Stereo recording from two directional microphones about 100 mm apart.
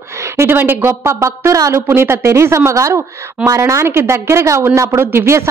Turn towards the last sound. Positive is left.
turn(degrees=-25)  # may be behind; listen again after turning